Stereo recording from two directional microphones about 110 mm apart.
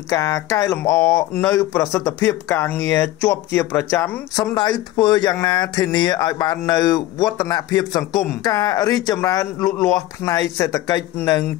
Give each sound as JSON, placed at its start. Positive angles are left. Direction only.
{"t": 0.1, "sound": "speech", "side_deg": 30}
{"t": 4.4, "sound": "speech", "side_deg": 40}